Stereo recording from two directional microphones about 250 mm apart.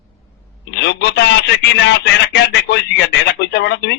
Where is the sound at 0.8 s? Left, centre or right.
Left.